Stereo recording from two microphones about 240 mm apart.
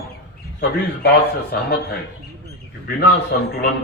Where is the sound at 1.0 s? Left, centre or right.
Left.